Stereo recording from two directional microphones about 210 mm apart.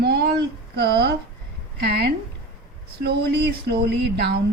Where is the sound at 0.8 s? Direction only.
50° right (ahead or behind).